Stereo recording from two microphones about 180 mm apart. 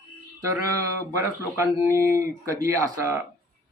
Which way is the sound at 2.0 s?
15° right (ahead or behind).